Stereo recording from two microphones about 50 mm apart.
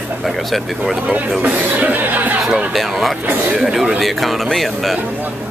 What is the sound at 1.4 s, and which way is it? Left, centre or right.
Speech, right.